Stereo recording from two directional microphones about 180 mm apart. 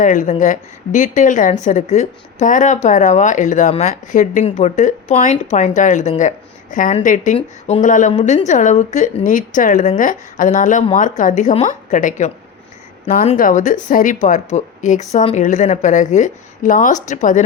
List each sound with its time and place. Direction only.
0.0 s speech: 45° left (ahead or behind)
13.3 s speech: 45° left (ahead or behind)